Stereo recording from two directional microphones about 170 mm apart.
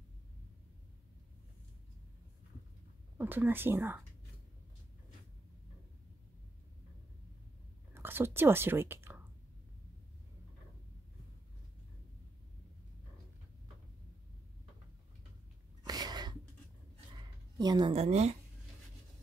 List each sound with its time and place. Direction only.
3.2 s speech: 10° right (ahead or behind)
7.9 s speech: 15° right (ahead or behind)
15.9 s a sound: 25° right (ahead or behind)
17.9 s speech: 40° right (ahead or behind)